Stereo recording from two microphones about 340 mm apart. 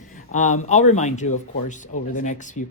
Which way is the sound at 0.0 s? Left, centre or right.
Left.